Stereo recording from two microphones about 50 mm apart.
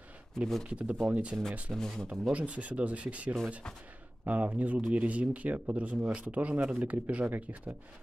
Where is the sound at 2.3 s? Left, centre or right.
Right.